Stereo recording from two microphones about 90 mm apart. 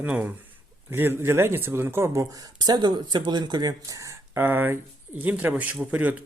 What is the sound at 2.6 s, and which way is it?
Speech, 50° right (ahead or behind).